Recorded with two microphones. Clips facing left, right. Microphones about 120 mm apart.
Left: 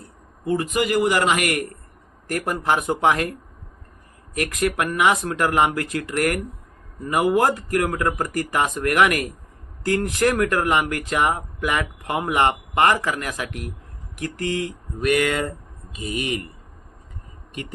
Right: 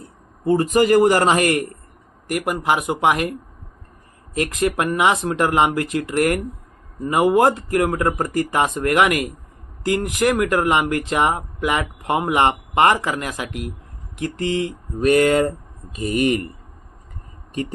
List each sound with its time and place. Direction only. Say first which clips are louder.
0.4 s speech: right 6 dB; 35° right (ahead or behind)
2.2 s speech: right 2 dB; 15° right (ahead or behind)
4.4 s speech: right 2 dB; 25° right (ahead or behind)
15.0 s speech: right 6 dB; 35° right (ahead or behind); by 16.4 s 50° right (ahead or behind)